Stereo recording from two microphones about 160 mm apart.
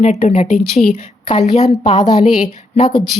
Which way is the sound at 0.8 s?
55° left (ahead or behind).